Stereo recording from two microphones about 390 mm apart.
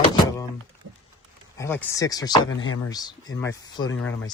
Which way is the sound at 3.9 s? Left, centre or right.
Left.